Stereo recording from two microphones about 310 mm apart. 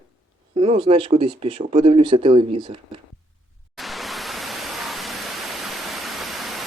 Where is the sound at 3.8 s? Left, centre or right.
Centre.